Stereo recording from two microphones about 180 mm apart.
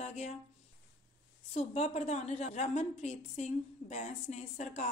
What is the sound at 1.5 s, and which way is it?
A woman's voice, 35° left (ahead or behind).